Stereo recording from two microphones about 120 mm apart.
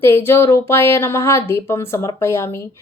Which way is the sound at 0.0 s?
20° left (ahead or behind).